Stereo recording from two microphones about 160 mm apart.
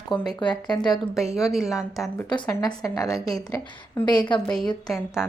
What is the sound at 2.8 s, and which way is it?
A woman's voice, 20° left (ahead or behind).